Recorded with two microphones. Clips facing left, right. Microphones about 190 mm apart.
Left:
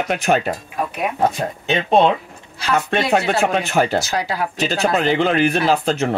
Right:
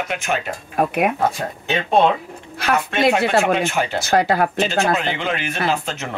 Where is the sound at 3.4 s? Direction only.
35° left (ahead or behind).